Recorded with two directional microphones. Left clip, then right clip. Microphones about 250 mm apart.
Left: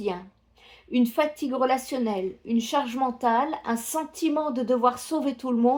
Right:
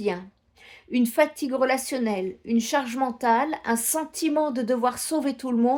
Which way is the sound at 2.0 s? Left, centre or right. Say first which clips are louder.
Right 1 dB; right.